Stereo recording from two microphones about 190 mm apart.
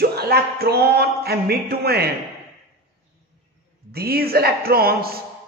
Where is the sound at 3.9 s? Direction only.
55° right (ahead or behind).